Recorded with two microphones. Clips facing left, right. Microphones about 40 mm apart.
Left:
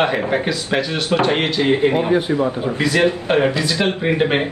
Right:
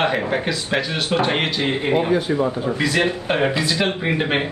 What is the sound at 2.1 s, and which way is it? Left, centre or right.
Speech, left.